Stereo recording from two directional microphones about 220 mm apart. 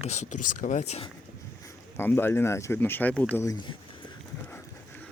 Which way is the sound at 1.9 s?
10° left (ahead or behind).